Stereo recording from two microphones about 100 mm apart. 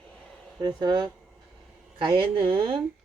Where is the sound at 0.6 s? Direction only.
45° right (ahead or behind); by 2.8 s 60° right (ahead or behind).